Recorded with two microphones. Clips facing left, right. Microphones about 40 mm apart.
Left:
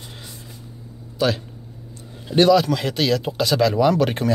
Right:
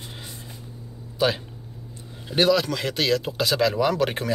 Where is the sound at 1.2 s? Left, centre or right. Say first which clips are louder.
Left 2 dB; centre.